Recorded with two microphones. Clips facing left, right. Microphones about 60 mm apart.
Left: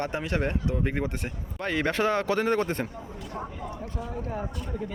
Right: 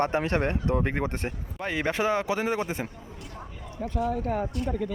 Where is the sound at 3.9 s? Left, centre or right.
Right.